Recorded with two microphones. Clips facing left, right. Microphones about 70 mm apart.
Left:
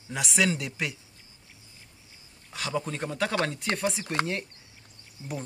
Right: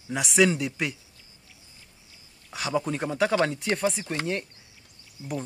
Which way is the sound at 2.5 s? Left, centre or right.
Centre.